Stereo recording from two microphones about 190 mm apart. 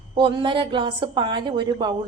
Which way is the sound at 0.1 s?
25° right (ahead or behind).